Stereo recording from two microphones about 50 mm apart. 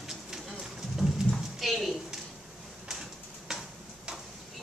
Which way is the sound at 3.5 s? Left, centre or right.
Centre.